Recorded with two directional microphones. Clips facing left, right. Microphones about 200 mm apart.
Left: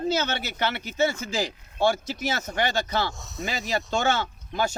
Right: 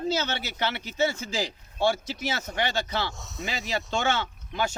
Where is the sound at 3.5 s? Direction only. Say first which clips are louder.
Left 3 dB; 45° left (ahead or behind).